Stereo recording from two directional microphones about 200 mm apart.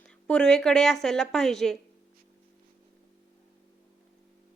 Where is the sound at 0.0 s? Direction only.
5° left (ahead or behind).